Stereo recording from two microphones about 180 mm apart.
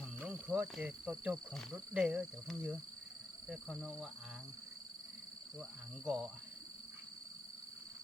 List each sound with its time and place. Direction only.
0.2 s speech: 5° right (ahead or behind)
6.1 s speech: 5° right (ahead or behind)